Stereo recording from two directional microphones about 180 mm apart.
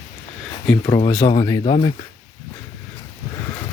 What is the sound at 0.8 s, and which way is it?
Speech, 25° left (ahead or behind).